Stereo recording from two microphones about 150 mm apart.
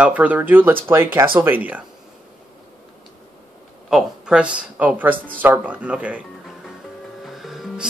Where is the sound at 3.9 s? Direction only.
5° right (ahead or behind).